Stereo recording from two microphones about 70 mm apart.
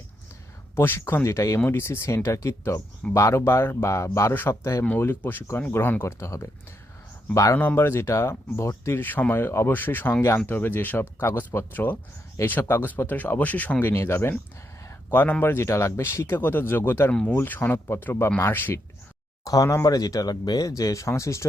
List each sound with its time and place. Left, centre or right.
0.8 s speech: left
6.0 s speech: left
7.5 s speech: left
9.0 s speech: left
17.1 s speech: centre
17.3 s speech: left
19.5 s speech: left